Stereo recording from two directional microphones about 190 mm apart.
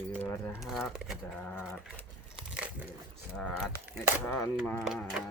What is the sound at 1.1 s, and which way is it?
Speech, 5° left (ahead or behind).